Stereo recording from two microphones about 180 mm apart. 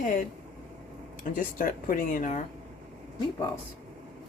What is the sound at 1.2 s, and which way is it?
Speech, 50° left (ahead or behind).